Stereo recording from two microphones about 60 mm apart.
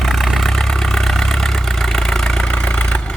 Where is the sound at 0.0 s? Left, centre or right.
Centre.